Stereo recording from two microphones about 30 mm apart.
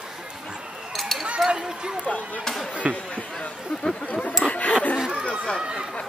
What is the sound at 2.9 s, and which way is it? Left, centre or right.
Speech, right.